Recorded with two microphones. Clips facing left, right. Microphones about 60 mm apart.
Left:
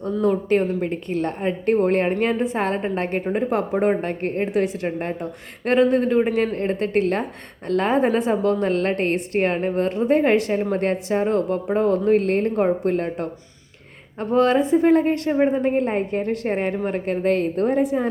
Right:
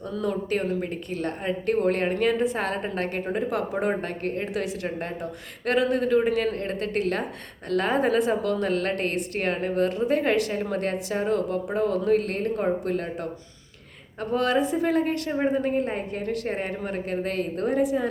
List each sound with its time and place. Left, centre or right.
0.0 s a woman's voice: left